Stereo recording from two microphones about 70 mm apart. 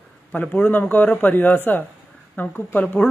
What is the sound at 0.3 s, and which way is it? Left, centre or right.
Speech, centre.